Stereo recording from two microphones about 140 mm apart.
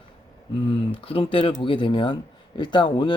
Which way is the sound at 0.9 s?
40° left (ahead or behind).